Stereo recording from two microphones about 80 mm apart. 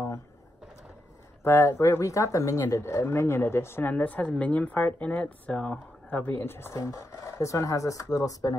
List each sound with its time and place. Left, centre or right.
1.4 s speech: left
3.9 s speech: centre
6.8 s speech: left